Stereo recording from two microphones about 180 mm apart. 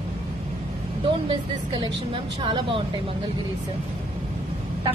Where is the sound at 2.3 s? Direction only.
25° right (ahead or behind).